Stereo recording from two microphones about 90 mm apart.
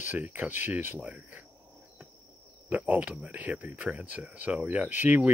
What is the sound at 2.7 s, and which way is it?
Speech, 20° right (ahead or behind).